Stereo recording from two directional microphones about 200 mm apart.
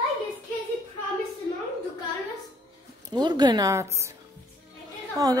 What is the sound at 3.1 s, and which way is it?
Speech, 20° right (ahead or behind).